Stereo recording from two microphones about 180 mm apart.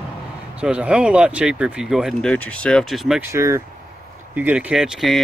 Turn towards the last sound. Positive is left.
turn(degrees=0)  # may be behind; listen again after turning